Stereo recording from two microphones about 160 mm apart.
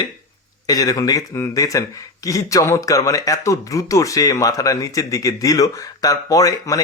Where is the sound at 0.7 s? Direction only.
20° left (ahead or behind).